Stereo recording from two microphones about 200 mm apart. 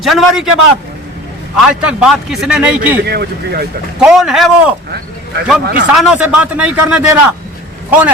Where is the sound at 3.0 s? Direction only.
55° right (ahead or behind).